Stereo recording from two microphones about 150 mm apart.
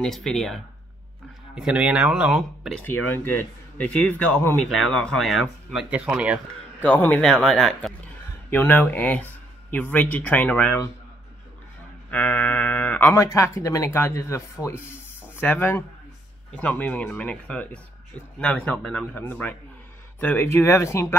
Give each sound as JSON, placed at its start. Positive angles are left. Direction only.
{"t": 0.0, "sound": "speech", "side_deg": 0}
{"t": 2.8, "sound": "speech", "side_deg": 15}
{"t": 6.8, "sound": "speech", "side_deg": 10}
{"t": 12.1, "sound": "speech", "side_deg": 10}
{"t": 13.2, "sound": "speech", "side_deg": 20}